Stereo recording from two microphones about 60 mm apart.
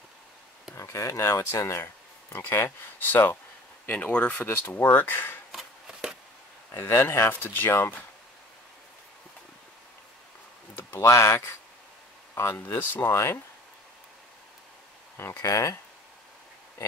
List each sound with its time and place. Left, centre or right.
0.7 s speech: left; by 4.5 s centre
4.5 s speech: left
5.9 s a sound: centre
6.7 s speech: left
7.4 s speech: left
11.0 s speech: left
12.5 s speech: left
13.1 s speech: left
15.1 s speech: left